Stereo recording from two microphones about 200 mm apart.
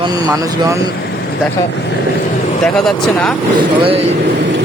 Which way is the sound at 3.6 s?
30° right (ahead or behind).